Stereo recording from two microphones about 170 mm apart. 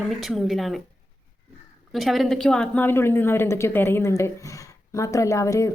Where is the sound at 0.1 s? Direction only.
Centre (ahead or behind).